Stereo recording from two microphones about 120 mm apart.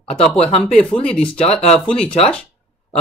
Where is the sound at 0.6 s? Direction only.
10° left (ahead or behind).